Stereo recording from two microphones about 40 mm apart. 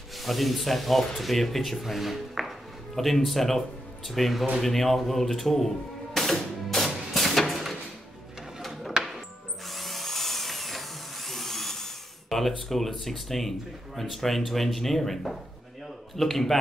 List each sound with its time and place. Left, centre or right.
0.2 s speech: centre
6.1 s music: centre
9.0 s music: centre
9.7 s drill: centre
14.1 s speech: centre